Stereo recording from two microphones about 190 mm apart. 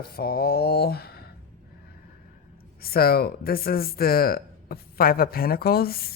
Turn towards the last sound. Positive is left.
turn(degrees=55)  # may be behind; listen again after turning